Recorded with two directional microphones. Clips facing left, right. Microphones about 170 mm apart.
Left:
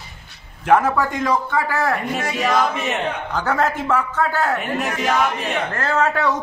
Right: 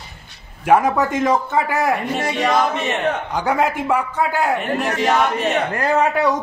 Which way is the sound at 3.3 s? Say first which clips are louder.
Left 1 dB; 10° right (ahead or behind).